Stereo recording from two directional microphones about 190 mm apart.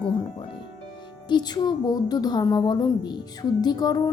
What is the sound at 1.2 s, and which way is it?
A woman's voice, 20° left (ahead or behind).